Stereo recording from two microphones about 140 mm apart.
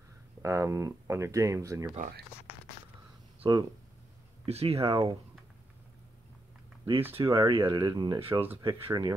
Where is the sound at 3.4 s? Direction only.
30° right (ahead or behind).